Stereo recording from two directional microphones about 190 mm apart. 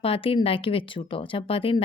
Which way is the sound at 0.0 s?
30° left (ahead or behind).